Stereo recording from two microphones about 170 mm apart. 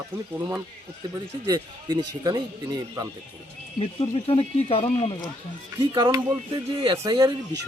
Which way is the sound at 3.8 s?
35° left (ahead or behind).